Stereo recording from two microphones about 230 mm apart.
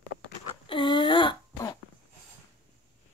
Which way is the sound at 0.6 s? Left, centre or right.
Left.